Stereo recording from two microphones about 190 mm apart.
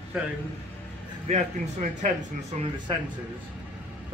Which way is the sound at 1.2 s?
40° right (ahead or behind).